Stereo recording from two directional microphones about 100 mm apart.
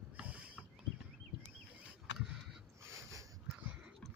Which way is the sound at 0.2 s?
15° right (ahead or behind).